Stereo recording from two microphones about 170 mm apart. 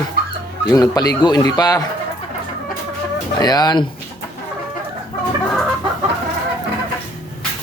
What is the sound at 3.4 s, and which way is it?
Speech, 25° left (ahead or behind).